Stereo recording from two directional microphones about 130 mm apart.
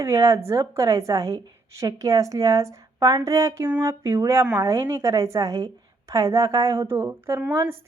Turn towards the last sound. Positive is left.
turn(degrees=-15)  # may be behind; listen again after turning